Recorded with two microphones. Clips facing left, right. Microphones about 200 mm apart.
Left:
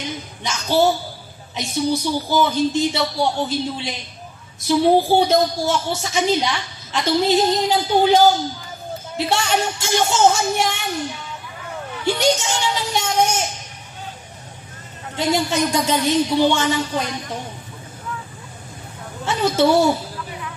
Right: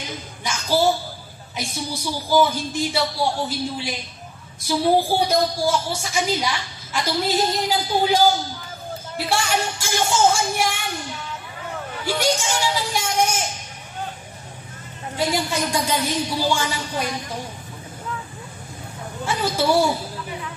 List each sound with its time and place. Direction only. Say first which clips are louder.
0.4 s a woman's voice: left 3 dB; 25° left (ahead or behind)
12.0 s a woman's voice: left 4 dB; 25° left (ahead or behind)
15.1 s a woman's voice: left 4 dB; 25° left (ahead or behind)
19.2 s a woman's voice: left 4 dB; 25° left (ahead or behind)